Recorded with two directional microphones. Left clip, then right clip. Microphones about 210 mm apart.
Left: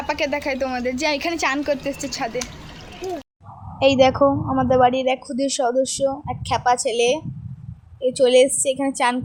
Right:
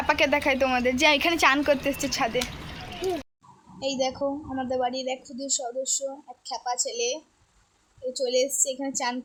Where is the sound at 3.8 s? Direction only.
35° left (ahead or behind).